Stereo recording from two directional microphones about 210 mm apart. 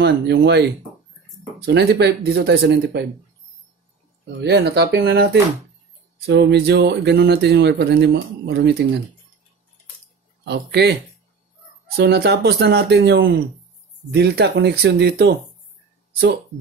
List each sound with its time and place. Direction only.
0.0 s speech: 50° right (ahead or behind)
1.7 s speech: 55° right (ahead or behind)
4.4 s speech: 55° right (ahead or behind)
10.4 s speech: 50° right (ahead or behind)
12.0 s speech: 50° right (ahead or behind)